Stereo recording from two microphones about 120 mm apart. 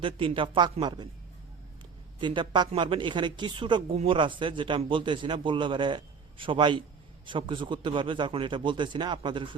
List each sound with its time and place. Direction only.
0.0 s speech: 50° right (ahead or behind)
2.2 s a man's voice: 40° right (ahead or behind)